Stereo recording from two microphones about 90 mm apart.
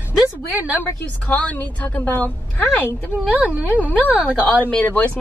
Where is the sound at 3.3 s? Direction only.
15° right (ahead or behind).